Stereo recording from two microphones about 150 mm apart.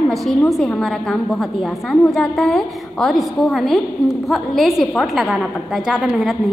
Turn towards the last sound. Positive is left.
turn(degrees=0)  # may be behind; listen again after turning